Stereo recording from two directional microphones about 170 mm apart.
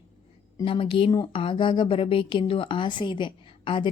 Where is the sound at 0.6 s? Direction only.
30° left (ahead or behind).